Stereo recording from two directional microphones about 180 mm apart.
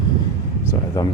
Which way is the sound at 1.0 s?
20° left (ahead or behind).